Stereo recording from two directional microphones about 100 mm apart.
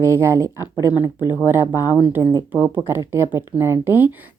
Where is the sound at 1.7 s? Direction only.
40° left (ahead or behind).